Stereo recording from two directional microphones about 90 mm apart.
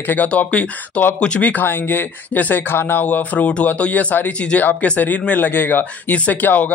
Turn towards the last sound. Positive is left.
turn(degrees=20)  # may be behind; listen again after turning